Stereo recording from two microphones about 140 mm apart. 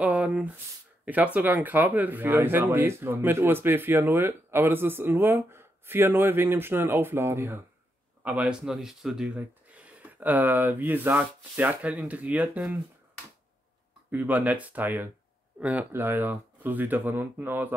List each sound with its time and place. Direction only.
0.0 s speech: 10° right (ahead or behind)
14.1 s speech: 10° right (ahead or behind)